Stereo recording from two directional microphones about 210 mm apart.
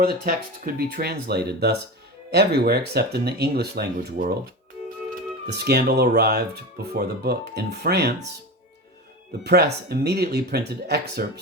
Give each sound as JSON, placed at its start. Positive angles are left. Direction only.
{"t": 0.0, "sound": "speech", "side_deg": -45}
{"t": 5.5, "sound": "speech", "side_deg": -50}
{"t": 9.4, "sound": "speech", "side_deg": -50}